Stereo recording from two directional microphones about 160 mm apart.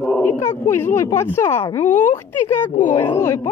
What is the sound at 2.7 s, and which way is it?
Speech, 55° left (ahead or behind).